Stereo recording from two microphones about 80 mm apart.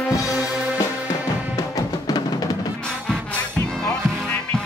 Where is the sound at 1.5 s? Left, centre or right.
Left.